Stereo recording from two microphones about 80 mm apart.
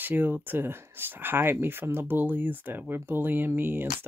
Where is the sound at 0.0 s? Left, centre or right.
Right.